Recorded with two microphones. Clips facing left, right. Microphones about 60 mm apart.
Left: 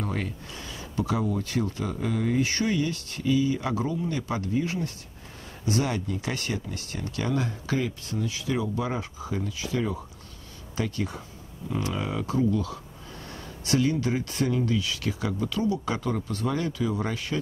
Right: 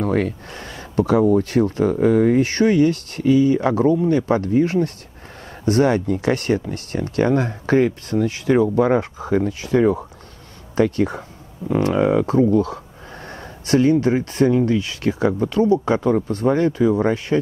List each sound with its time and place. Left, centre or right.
0.0 s speech: right